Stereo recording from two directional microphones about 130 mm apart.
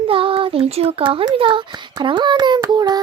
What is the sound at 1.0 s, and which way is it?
A child's voice, 40° right (ahead or behind).